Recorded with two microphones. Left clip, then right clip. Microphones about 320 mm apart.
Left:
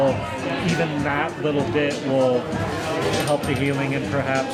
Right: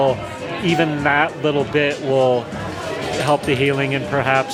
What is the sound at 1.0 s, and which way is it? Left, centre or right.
Speech, right.